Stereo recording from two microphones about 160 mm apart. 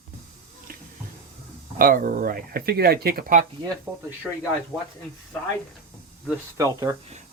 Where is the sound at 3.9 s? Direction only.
5° right (ahead or behind).